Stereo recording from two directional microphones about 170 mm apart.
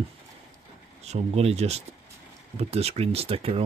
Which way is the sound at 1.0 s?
40° right (ahead or behind).